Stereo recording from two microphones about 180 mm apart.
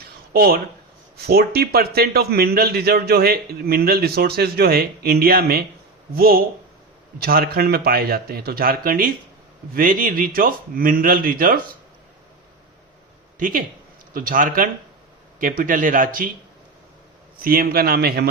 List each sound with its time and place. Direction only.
0.3 s a man's voice: 60° right (ahead or behind)
13.4 s speech: 50° right (ahead or behind)
17.4 s a man's voice: 55° right (ahead or behind)